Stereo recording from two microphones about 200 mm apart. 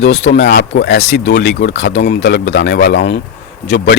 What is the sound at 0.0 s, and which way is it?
Speech, 60° left (ahead or behind).